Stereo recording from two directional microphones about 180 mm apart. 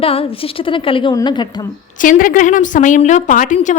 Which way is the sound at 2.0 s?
50° left (ahead or behind).